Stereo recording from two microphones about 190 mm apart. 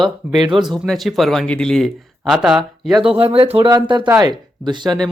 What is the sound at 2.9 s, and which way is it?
Speech, 30° right (ahead or behind).